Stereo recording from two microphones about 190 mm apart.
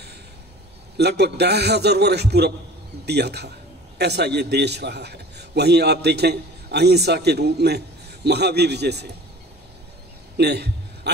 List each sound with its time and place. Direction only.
0.9 s a man's voice: 60° right (ahead or behind)
10.3 s a man's voice: 60° right (ahead or behind)